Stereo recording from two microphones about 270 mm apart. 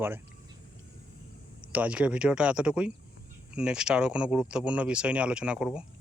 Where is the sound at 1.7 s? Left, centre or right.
Centre.